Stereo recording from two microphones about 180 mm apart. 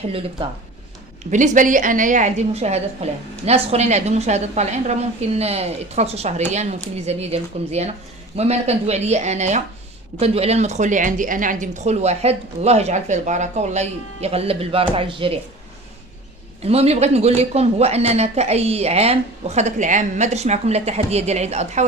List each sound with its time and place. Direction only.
0.1 s a woman's voice: 30° right (ahead or behind)
1.3 s a woman's voice: 45° right (ahead or behind)
16.6 s a woman's voice: 35° right (ahead or behind)